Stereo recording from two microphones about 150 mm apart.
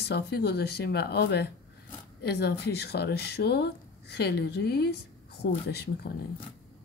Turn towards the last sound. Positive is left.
turn(degrees=90)